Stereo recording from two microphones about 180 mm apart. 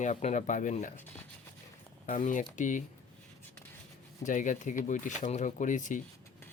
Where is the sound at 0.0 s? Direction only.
40° left (ahead or behind).